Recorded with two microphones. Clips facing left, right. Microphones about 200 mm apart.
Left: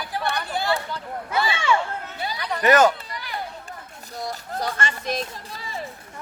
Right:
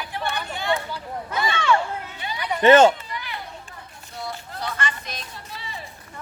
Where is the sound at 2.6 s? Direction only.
25° right (ahead or behind).